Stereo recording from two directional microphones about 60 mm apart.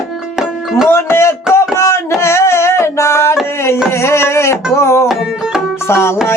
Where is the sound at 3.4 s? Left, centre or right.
Left.